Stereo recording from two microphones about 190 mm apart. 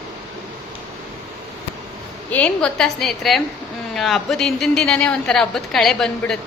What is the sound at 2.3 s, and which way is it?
A woman's voice, 5° left (ahead or behind).